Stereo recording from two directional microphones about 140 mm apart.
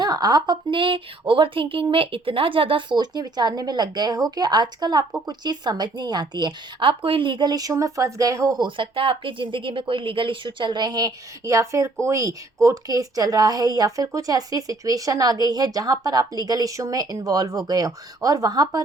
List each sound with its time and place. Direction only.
0.0 s a woman's voice: 30° right (ahead or behind)